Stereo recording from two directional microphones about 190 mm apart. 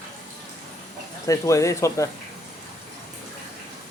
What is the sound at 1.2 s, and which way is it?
Speech, 15° left (ahead or behind).